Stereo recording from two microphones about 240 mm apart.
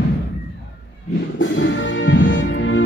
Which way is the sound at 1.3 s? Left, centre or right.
Left.